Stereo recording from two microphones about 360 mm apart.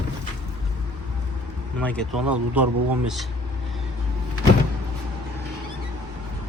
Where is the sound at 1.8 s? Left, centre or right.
Centre.